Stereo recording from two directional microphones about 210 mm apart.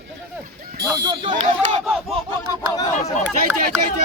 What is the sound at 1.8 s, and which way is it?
Speech, centre (ahead or behind).